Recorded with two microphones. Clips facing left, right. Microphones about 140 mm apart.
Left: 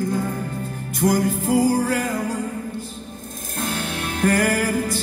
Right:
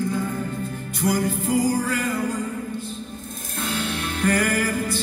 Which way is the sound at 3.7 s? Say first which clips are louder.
Right 2 dB; 45° left (ahead or behind).